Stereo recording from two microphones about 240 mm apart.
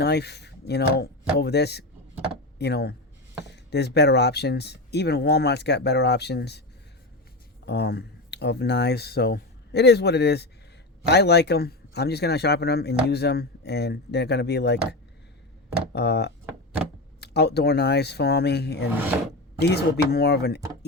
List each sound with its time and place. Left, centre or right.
0.0 s a man's voice: left
7.6 s a man's voice: left
15.9 s a man's voice: left